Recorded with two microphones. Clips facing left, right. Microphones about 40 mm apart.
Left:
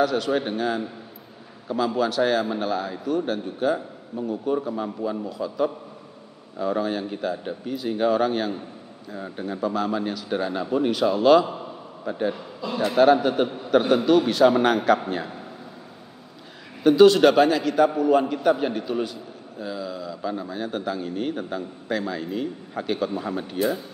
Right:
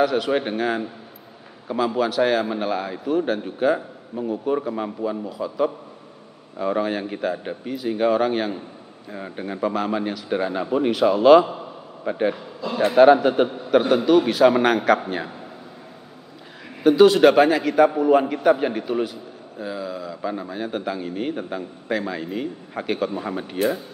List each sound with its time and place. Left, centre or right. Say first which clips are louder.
0.0 s a man's voice: right 2 dB; centre
4.6 s a man's voice: right 2 dB; right
5.2 s a man's voice: right 2 dB; centre
9.1 s a man's voice: right 1 dB; right
10.0 s a man's voice: right 2 dB; centre
10.4 s a man's voice: right 2 dB; right
10.8 s a man's voice: right 3 dB; centre
12.0 s a man's voice: right 4 dB; right
12.9 s a man's voice: right 4 dB; centre
16.8 s a man's voice: right 1 dB; centre